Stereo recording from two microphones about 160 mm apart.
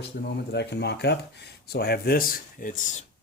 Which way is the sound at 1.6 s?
80° left.